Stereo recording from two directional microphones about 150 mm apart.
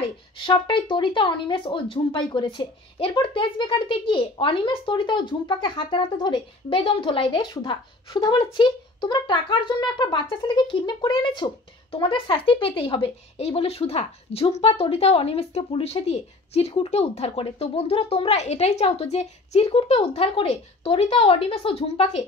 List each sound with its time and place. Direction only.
0.4 s speech: 35° left (ahead or behind)